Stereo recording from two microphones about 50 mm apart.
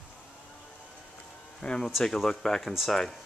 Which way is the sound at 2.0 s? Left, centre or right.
Centre.